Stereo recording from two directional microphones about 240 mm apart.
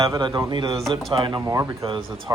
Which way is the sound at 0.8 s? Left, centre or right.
Centre.